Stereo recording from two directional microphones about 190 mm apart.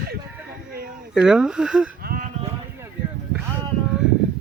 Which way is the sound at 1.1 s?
5° right (ahead or behind).